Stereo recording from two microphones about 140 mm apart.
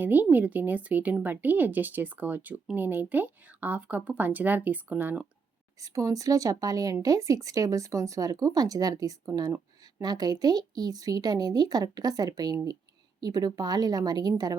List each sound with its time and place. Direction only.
0.0 s speech: 10° right (ahead or behind)